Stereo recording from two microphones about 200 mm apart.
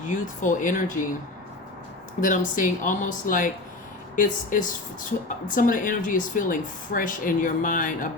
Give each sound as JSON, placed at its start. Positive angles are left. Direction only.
{"t": 0.0, "sound": "speech", "side_deg": 40}
{"t": 2.2, "sound": "speech", "side_deg": 40}